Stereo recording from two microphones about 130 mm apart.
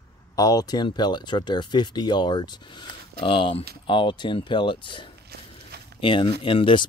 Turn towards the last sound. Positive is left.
turn(degrees=40)  # may be behind; listen again after turning